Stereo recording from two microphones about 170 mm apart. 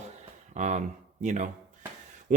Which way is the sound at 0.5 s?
45° right (ahead or behind).